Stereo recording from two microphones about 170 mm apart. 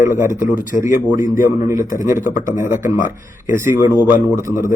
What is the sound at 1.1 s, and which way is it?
Speech, 50° left (ahead or behind).